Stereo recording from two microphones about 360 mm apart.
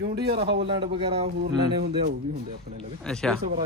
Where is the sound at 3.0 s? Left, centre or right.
Centre.